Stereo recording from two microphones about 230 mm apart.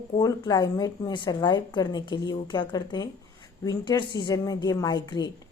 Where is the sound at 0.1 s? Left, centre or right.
Centre.